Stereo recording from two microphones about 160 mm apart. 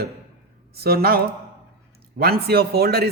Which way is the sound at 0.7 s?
75° right (ahead or behind).